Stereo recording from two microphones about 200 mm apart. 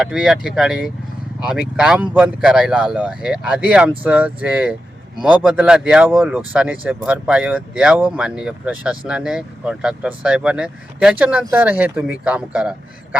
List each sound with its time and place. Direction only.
0.0 s speech: centre (ahead or behind)